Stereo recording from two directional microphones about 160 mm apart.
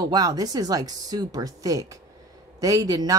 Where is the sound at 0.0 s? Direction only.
25° right (ahead or behind).